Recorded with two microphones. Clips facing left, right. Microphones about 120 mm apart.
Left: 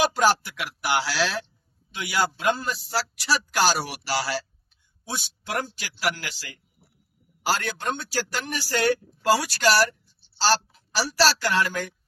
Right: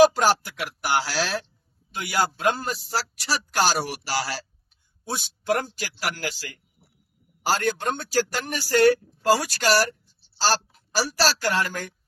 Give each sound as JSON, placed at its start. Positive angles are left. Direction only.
{"t": 0.2, "sound": "a man's voice", "side_deg": -45}
{"t": 7.4, "sound": "a man's voice", "side_deg": -40}